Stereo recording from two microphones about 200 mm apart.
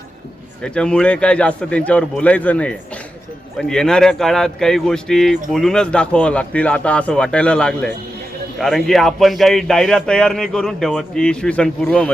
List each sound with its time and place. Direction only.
0.6 s speech: 5° left (ahead or behind)